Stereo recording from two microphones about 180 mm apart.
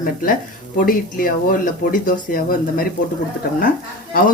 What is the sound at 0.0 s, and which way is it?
Speech, 50° left (ahead or behind).